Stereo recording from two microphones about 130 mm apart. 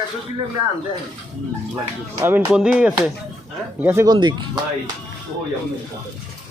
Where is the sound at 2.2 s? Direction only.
15° right (ahead or behind).